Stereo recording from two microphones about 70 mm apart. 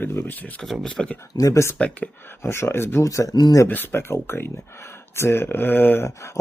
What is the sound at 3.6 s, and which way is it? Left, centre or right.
Speech, left.